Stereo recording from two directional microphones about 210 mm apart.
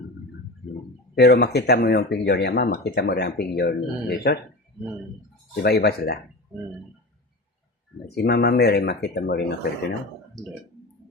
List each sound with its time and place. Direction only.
1.1 s speech: 50° left (ahead or behind)
5.6 s speech: 50° left (ahead or behind)
8.0 s speech: 50° left (ahead or behind)